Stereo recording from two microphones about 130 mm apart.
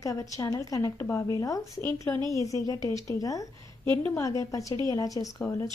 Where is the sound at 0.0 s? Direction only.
25° left (ahead or behind).